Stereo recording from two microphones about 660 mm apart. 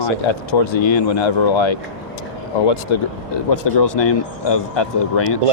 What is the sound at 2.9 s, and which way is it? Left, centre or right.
Speech, left.